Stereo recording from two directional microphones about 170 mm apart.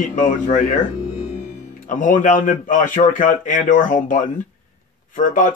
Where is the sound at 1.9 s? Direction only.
50° left (ahead or behind).